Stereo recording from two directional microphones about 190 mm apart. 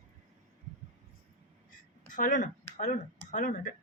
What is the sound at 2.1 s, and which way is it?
Speech, 40° left (ahead or behind).